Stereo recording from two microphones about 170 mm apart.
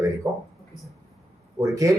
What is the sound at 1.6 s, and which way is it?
Speech, 20° right (ahead or behind).